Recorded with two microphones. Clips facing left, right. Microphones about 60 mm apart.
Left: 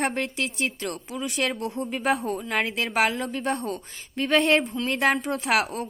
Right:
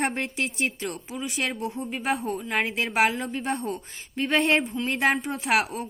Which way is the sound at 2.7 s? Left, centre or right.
Centre.